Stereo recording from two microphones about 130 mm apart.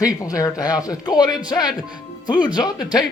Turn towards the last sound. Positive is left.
turn(degrees=30)  # may be behind; listen again after turning